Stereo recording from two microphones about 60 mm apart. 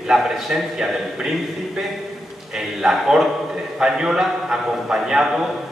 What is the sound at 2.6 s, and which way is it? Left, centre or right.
A man's voice, centre.